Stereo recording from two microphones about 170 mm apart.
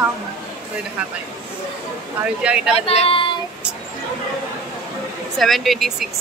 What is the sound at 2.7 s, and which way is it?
Speech, 35° left (ahead or behind).